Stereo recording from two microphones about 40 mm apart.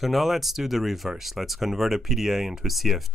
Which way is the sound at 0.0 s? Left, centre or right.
Centre.